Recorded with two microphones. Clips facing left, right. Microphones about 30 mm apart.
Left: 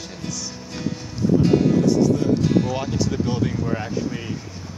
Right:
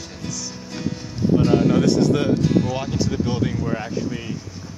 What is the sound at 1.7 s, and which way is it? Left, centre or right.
Speech, right.